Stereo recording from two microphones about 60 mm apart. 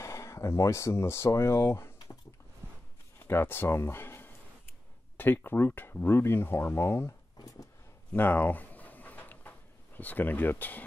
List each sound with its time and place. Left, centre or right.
0.0 s speech: left
3.3 s speech: left
8.1 s a sound: left